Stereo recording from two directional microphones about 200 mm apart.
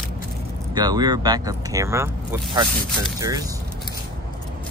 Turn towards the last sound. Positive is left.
turn(degrees=-20)  # may be behind; listen again after turning